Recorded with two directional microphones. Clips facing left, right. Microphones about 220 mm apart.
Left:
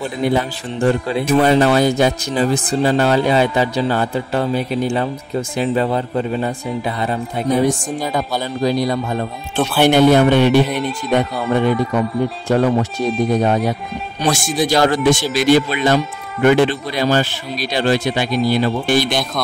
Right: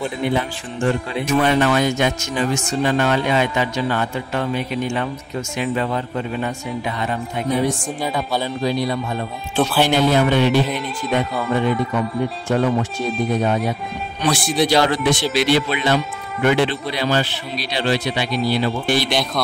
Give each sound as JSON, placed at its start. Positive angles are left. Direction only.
{"t": 0.2, "sound": "speech", "side_deg": 40}
{"t": 9.8, "sound": "speech", "side_deg": 60}
{"t": 12.4, "sound": "speech", "side_deg": 35}